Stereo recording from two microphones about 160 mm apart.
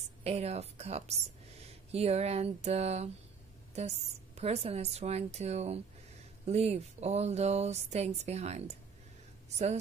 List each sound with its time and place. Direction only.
0.2 s speech: 40° right (ahead or behind)
4.4 s speech: 40° right (ahead or behind)